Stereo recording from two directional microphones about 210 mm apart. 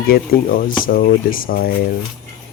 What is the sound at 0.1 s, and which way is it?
Speech, 40° left (ahead or behind).